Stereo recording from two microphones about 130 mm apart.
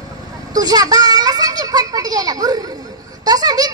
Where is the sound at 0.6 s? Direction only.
30° right (ahead or behind).